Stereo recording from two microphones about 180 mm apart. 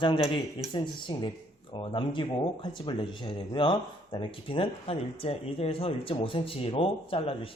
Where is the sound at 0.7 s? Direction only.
25° left (ahead or behind).